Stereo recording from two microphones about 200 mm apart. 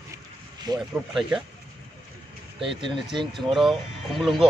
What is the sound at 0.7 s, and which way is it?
Speech, 20° right (ahead or behind).